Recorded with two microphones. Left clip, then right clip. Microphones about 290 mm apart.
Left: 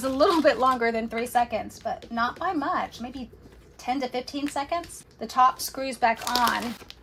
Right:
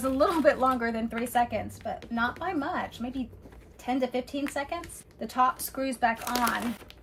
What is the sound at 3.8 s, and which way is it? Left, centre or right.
Speech, centre.